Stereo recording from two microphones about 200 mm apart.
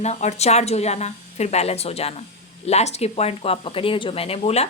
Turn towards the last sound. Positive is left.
turn(degrees=30)  # may be behind; listen again after turning